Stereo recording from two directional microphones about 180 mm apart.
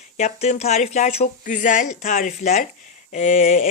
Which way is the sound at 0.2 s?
40° left (ahead or behind).